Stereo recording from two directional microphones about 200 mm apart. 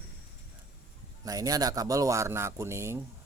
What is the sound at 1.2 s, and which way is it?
Speech, 20° right (ahead or behind).